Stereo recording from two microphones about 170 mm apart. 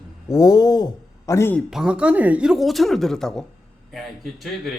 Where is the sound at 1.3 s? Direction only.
15° left (ahead or behind).